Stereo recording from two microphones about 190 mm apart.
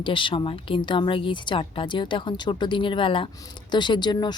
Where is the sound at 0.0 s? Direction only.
25° left (ahead or behind).